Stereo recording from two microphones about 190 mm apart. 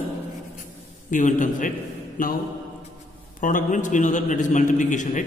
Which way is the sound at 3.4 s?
45° left (ahead or behind).